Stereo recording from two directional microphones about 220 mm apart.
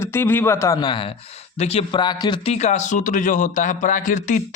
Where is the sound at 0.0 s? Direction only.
10° left (ahead or behind).